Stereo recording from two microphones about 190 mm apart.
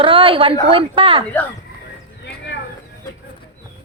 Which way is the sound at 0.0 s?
30° right (ahead or behind).